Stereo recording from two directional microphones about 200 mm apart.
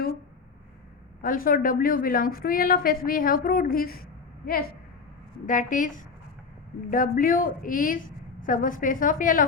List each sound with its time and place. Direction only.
1.2 s a woman's voice: 45° left (ahead or behind)
5.5 s a woman's voice: 40° left (ahead or behind)